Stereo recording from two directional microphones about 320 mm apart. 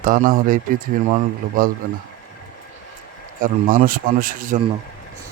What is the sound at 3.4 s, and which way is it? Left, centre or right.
Speech, right.